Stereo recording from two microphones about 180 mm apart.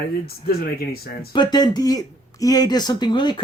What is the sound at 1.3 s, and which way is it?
Speech, 25° left (ahead or behind).